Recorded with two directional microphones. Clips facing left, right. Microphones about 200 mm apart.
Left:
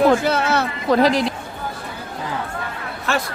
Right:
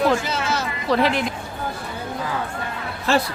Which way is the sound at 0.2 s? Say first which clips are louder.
Left 6 dB; 60° left (ahead or behind).